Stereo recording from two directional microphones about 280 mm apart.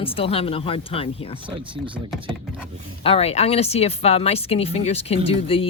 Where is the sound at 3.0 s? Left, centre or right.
Left.